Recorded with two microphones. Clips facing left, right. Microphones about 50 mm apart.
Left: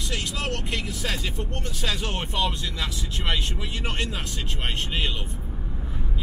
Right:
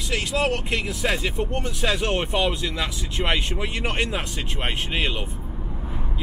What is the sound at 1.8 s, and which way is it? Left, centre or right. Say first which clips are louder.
Speech: right 5 dB; right.